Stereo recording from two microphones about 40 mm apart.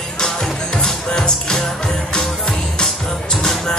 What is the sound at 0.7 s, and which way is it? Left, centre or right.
Music, centre.